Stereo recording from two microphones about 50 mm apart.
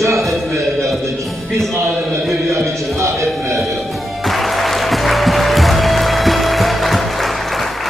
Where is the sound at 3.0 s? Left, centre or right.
Right.